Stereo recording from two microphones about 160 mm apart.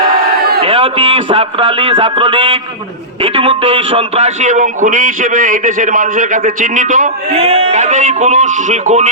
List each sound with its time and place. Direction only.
0.6 s a man's voice: 35° right (ahead or behind); by 7.1 s 55° right (ahead or behind)
7.3 s a man's voice: 40° right (ahead or behind)